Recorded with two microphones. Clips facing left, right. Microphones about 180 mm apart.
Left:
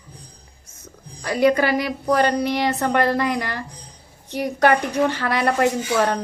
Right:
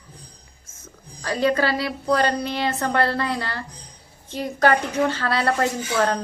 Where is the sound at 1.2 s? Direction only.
15° left (ahead or behind).